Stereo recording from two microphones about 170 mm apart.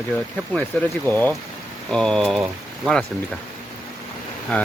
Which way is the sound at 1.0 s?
10° left (ahead or behind).